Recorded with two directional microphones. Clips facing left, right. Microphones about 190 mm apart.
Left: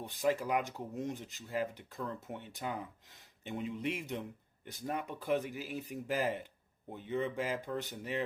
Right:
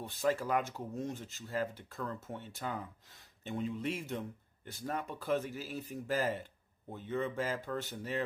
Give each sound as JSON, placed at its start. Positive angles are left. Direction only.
{"t": 0.0, "sound": "speech", "side_deg": 15}